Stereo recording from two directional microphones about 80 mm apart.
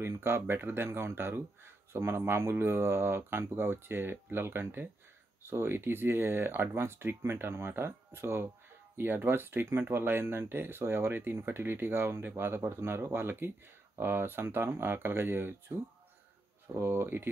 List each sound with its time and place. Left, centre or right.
0.0 s speech: right